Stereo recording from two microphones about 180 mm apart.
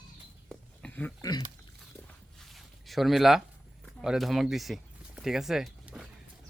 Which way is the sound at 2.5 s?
Centre (ahead or behind).